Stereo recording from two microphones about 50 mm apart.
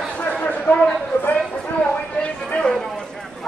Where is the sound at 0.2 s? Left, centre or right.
Left.